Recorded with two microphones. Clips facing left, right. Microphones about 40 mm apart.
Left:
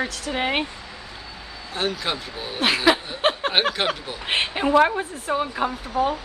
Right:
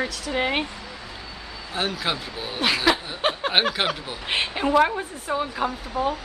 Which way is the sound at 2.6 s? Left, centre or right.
Centre.